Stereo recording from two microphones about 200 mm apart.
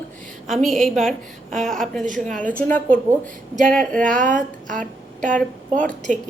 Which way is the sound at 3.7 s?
5° left (ahead or behind).